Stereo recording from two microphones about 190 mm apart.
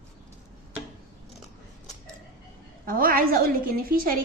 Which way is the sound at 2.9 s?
50° right (ahead or behind).